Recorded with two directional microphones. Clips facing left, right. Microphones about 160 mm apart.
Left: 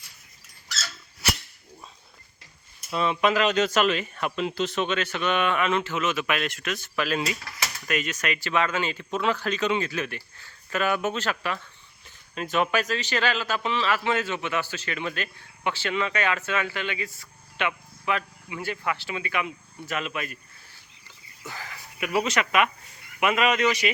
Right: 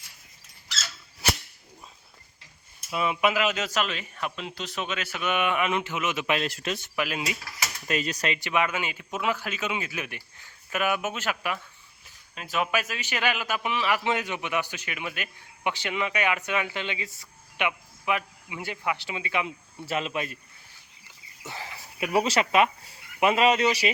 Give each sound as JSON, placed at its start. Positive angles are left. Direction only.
{"t": 2.9, "sound": "a man's voice", "side_deg": -10}
{"t": 3.8, "sound": "speech", "side_deg": 70}
{"t": 4.7, "sound": "a man's voice", "side_deg": -5}
{"t": 6.2, "sound": "a man's voice", "side_deg": -30}
{"t": 6.9, "sound": "a man's voice", "side_deg": -15}
{"t": 7.9, "sound": "speech", "side_deg": -30}
{"t": 8.4, "sound": "a man's voice", "side_deg": -15}
{"t": 21.4, "sound": "speech", "side_deg": -25}